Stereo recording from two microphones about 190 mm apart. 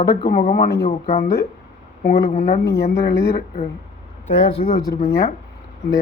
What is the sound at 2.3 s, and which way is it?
Speech, 40° left (ahead or behind).